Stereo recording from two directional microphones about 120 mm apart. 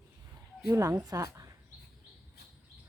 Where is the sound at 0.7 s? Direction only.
30° right (ahead or behind).